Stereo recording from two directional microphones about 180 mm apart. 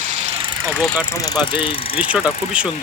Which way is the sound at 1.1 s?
20° left (ahead or behind).